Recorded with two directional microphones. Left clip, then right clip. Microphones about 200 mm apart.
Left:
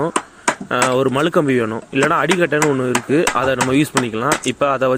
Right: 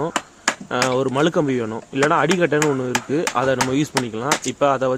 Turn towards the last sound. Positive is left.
turn(degrees=10)  # may be behind; listen again after turning